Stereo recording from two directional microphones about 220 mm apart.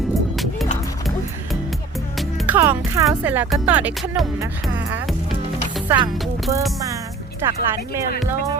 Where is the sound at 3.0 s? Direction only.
5° right (ahead or behind).